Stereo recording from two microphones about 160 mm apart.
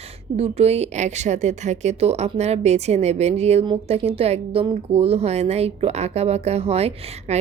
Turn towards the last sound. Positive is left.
turn(degrees=-40)  # may be behind; listen again after turning